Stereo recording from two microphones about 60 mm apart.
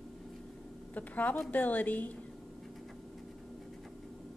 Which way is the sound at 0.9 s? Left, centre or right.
Left.